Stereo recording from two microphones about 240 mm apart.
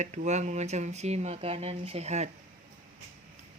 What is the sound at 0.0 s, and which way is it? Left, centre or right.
Speech, right.